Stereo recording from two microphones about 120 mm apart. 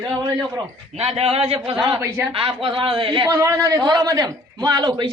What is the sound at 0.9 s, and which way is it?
Speech, 55° right (ahead or behind).